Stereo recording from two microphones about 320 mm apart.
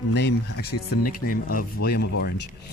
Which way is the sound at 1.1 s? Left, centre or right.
Left.